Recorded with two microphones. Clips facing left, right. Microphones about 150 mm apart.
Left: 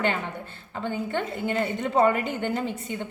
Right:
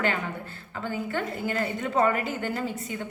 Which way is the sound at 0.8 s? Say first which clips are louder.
Left 2 dB; 25° left (ahead or behind).